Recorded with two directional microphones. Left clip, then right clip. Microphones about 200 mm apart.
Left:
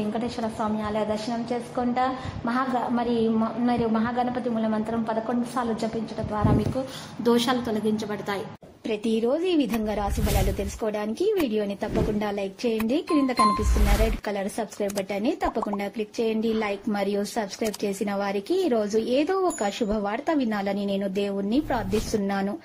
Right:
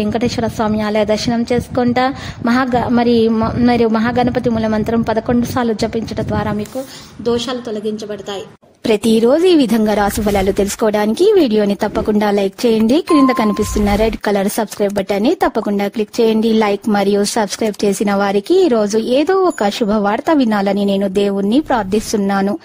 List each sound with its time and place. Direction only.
0.1 s a woman's voice: 45° right (ahead or behind)
7.2 s a woman's voice: 5° right (ahead or behind)
8.8 s speech: 65° right (ahead or behind)